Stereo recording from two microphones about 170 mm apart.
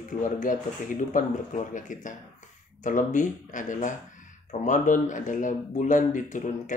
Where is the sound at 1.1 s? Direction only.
50° left (ahead or behind).